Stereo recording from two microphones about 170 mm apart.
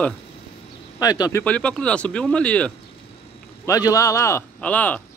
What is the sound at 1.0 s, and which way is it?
Speech, 20° left (ahead or behind).